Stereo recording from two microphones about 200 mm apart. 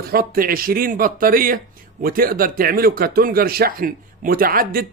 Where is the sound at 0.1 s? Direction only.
45° right (ahead or behind).